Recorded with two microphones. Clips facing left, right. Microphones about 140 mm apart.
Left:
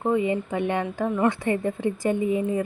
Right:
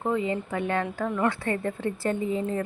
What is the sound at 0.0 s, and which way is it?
A woman's voice, 15° left (ahead or behind).